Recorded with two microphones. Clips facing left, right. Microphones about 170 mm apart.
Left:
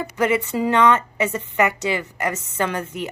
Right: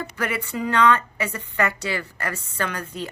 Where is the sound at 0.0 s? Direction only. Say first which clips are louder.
Left 7 dB; 20° left (ahead or behind).